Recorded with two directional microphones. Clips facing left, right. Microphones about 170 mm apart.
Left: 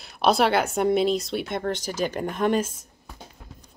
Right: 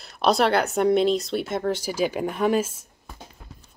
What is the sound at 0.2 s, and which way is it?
Speech, centre (ahead or behind).